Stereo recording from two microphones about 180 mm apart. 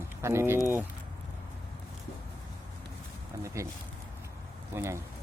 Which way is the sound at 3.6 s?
15° right (ahead or behind).